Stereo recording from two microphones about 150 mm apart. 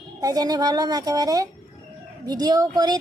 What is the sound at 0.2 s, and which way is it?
Speech, 25° right (ahead or behind).